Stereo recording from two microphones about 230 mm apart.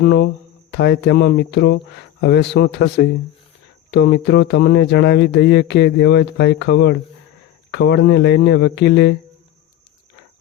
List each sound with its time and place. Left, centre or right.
0.0 s speech: left